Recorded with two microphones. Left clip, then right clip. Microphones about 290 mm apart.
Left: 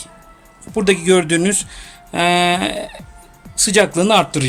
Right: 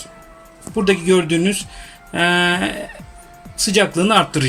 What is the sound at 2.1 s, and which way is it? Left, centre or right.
Speech, centre.